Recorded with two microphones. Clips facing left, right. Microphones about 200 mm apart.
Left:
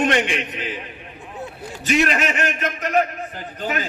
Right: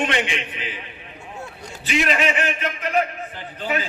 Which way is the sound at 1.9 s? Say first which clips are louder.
Left 2 dB; 45° left (ahead or behind).